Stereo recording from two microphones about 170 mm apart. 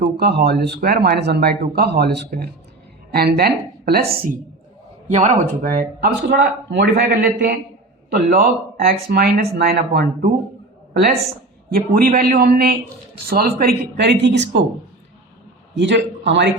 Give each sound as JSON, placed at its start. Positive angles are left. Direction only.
{"t": 0.0, "sound": "speech", "side_deg": -75}
{"t": 5.0, "sound": "speech", "side_deg": -45}
{"t": 6.0, "sound": "speech", "side_deg": -75}
{"t": 11.7, "sound": "speech", "side_deg": -55}
{"t": 15.7, "sound": "a man's voice", "side_deg": -90}